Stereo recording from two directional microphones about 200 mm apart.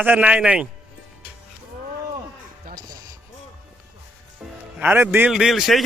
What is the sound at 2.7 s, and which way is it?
Music, 45° right (ahead or behind).